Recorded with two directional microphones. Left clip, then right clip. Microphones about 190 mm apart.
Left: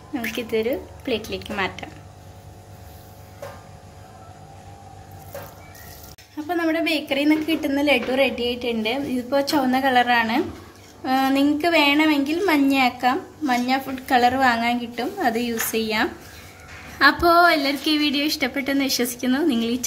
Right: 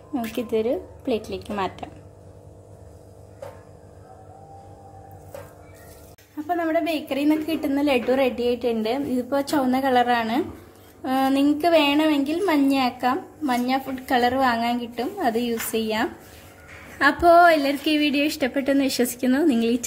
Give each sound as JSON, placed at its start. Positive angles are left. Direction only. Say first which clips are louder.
{"t": 0.4, "sound": "a woman's voice", "louder": "even", "side_deg": -35}
{"t": 6.4, "sound": "a woman's voice", "louder": "left 1 dB", "side_deg": -25}
{"t": 8.5, "sound": "a woman's voice", "louder": "even", "side_deg": 0}
{"t": 9.1, "sound": "a woman's voice", "louder": "left 4 dB", "side_deg": -25}